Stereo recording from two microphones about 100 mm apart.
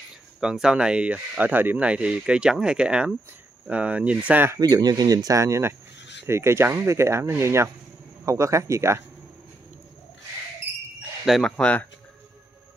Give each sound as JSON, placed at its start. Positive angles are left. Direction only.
{"t": 0.4, "sound": "speech", "side_deg": -5}
{"t": 4.6, "sound": "speech", "side_deg": -40}
{"t": 11.2, "sound": "speech", "side_deg": 0}